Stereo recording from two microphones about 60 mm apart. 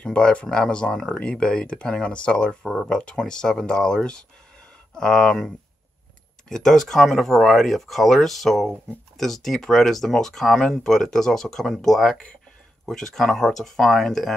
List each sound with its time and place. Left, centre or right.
0.0 s speech: centre
6.5 s speech: centre